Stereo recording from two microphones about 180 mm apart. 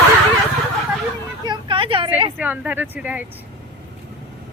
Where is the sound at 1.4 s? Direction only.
25° right (ahead or behind).